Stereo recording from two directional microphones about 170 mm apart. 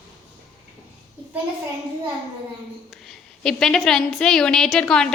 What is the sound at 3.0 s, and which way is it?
A woman's voice, 5° left (ahead or behind).